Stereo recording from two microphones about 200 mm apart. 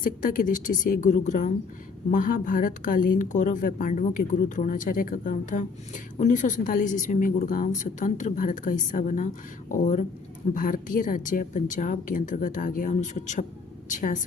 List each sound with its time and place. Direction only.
0.0 s a woman's voice: 45° left (ahead or behind)